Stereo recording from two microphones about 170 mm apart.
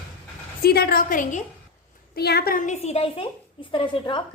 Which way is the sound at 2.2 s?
70° left (ahead or behind).